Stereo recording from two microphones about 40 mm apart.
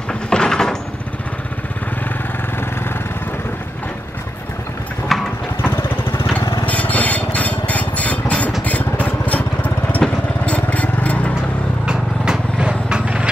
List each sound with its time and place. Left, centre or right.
0.3 s door: centre
5.1 s vehicle: centre
5.6 s vehicle: left
6.6 s a sound: left
8.6 s lawn mower: left
10.0 s vehicle: left
11.8 s vehicle: right
13.0 s a sound: right